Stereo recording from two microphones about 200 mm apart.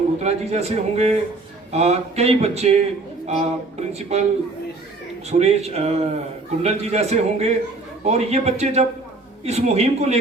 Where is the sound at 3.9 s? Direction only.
30° right (ahead or behind).